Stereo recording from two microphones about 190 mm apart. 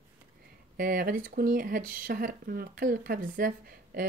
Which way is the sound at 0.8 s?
50° right (ahead or behind).